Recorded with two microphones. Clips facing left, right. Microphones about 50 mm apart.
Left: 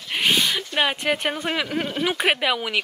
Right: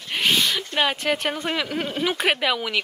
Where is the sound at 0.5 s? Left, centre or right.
Centre.